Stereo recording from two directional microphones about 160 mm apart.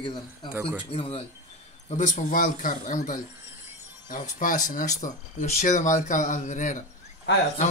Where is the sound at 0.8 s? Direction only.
35° left (ahead or behind).